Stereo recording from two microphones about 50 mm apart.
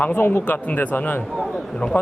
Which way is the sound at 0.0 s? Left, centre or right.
Left.